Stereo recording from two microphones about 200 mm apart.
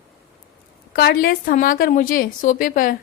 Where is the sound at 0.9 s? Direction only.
50° left (ahead or behind).